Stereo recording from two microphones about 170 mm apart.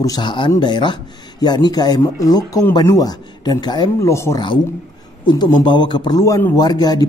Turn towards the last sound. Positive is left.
turn(degrees=25)  # may be behind; listen again after turning